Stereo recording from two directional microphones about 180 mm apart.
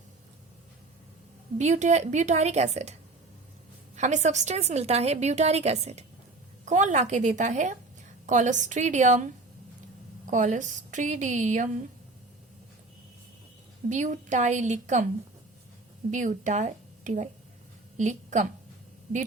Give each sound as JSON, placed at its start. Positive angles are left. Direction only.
{"t": 1.5, "sound": "a woman's voice", "side_deg": -40}
{"t": 3.9, "sound": "a woman's voice", "side_deg": -40}
{"t": 13.9, "sound": "a woman's voice", "side_deg": -45}
{"t": 16.1, "sound": "a woman's voice", "side_deg": -45}